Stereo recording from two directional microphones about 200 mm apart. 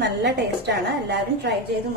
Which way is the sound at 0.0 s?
55° right (ahead or behind).